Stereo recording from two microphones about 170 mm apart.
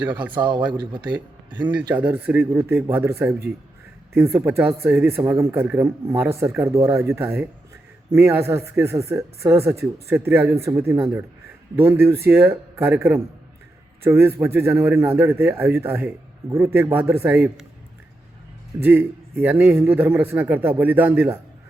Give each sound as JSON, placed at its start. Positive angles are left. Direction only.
{"t": 0.0, "sound": "a man's voice", "side_deg": -10}
{"t": 0.3, "sound": "speech", "side_deg": -25}
{"t": 1.0, "sound": "a man's voice", "side_deg": -10}
{"t": 18.8, "sound": "a man's voice", "side_deg": -10}